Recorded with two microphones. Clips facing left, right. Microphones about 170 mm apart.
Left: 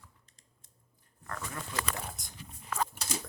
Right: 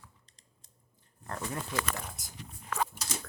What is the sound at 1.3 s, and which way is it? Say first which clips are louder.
Speech: right 4 dB; 30° right (ahead or behind).